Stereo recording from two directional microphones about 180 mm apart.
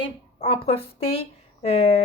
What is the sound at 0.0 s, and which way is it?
A woman's voice, 30° left (ahead or behind).